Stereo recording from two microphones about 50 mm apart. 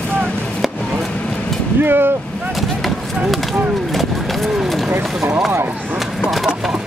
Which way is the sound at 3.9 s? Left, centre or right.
Centre.